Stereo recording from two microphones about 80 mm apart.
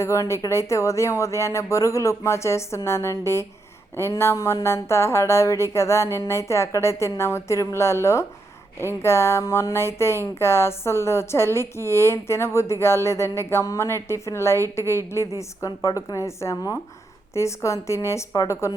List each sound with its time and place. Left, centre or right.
0.0 s music: left
15.4 s music: left